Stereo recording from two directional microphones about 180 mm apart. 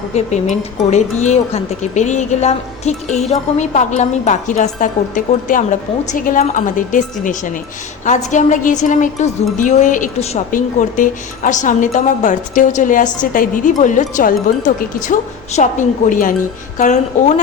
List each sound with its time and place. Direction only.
0.1 s a woman's voice: 40° left (ahead or behind)